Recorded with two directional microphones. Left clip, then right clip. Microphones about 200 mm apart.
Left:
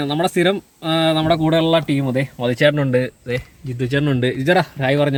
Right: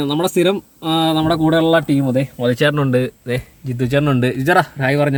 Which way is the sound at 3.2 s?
45° right (ahead or behind).